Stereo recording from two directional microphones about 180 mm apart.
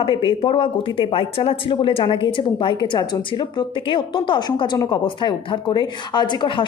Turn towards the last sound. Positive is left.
turn(degrees=25)  # may be behind; listen again after turning